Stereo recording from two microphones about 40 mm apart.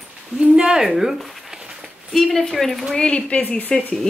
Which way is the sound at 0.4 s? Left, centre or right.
Right.